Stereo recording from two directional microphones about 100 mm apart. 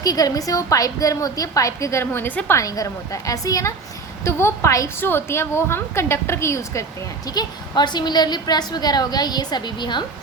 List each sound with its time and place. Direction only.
0.0 s a woman's voice: 40° left (ahead or behind); by 2.6 s 20° left (ahead or behind)
2.6 s a woman's voice: 35° left (ahead or behind)
7.3 s a woman's voice: 45° left (ahead or behind)